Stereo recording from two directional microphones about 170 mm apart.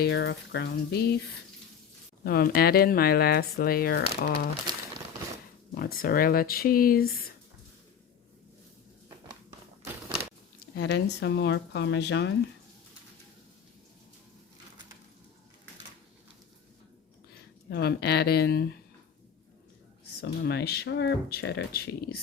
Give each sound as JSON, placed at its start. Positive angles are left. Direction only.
{"t": 0.0, "sound": "speech", "side_deg": 90}
{"t": 2.2, "sound": "speech", "side_deg": 65}
{"t": 4.7, "sound": "crumpling", "side_deg": -25}
{"t": 5.7, "sound": "speech", "side_deg": 60}
{"t": 10.8, "sound": "speech", "side_deg": 85}
{"t": 17.7, "sound": "speech", "side_deg": 70}
{"t": 20.2, "sound": "speech", "side_deg": 75}